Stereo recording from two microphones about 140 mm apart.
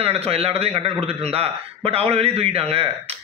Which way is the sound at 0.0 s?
45° right (ahead or behind).